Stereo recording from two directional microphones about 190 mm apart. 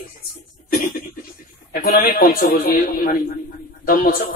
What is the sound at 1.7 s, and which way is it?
Speech, 50° left (ahead or behind).